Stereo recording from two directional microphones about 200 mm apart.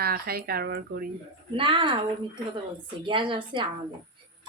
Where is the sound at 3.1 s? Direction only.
25° right (ahead or behind).